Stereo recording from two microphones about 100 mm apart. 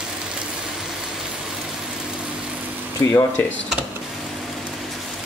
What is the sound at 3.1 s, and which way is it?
Speech, 25° left (ahead or behind).